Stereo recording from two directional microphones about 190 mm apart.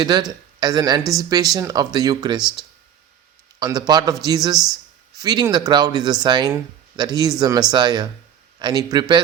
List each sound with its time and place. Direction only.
0.0 s speech: 20° right (ahead or behind)
3.6 s speech: 20° right (ahead or behind)